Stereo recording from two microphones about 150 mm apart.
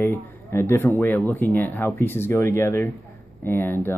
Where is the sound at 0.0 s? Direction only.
15° left (ahead or behind).